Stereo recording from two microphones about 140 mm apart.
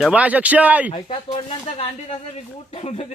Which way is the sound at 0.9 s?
40° left (ahead or behind).